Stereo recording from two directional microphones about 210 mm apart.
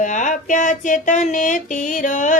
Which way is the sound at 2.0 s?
35° left (ahead or behind).